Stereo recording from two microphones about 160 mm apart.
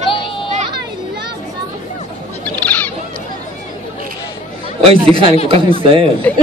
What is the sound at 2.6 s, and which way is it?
Bird, 10° left (ahead or behind).